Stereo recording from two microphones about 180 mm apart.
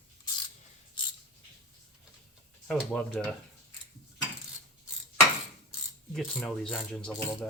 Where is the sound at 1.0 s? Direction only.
25° left (ahead or behind).